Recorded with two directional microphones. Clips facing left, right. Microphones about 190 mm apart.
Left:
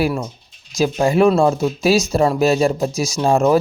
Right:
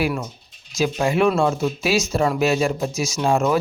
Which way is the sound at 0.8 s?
35° left (ahead or behind).